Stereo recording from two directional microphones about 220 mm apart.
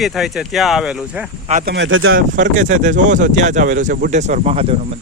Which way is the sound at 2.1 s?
35° right (ahead or behind).